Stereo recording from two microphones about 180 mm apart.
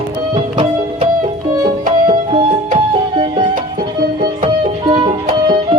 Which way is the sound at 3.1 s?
30° right (ahead or behind).